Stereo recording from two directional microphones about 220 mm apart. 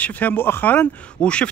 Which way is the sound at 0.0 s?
10° left (ahead or behind).